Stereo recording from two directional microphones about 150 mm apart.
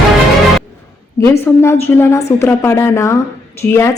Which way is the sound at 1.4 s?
15° left (ahead or behind).